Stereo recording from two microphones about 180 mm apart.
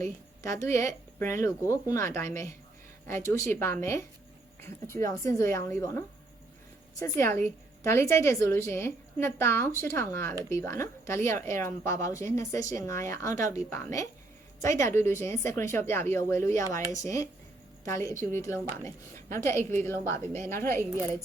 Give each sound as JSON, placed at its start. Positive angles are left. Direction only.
{"t": 0.0, "sound": "a woman's voice", "side_deg": 15}
{"t": 7.0, "sound": "a woman's voice", "side_deg": 15}